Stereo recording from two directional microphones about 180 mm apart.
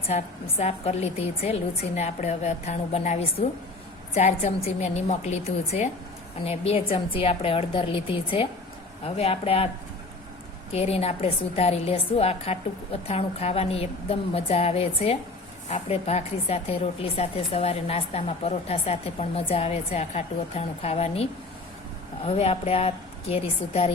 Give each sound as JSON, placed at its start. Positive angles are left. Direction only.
{"t": 0.1, "sound": "a woman's voice", "side_deg": 35}
{"t": 10.7, "sound": "a woman's voice", "side_deg": 35}